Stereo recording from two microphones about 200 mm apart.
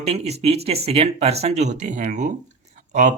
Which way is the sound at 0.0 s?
30° right (ahead or behind).